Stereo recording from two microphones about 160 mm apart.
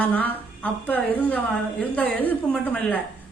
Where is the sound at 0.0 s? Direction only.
10° left (ahead or behind).